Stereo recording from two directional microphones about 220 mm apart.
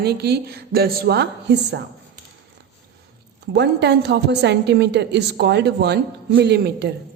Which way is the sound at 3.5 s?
50° right (ahead or behind).